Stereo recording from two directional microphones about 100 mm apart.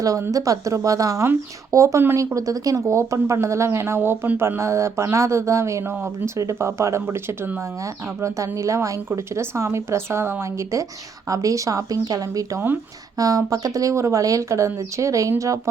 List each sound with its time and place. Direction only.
0.0 s speech: 35° right (ahead or behind)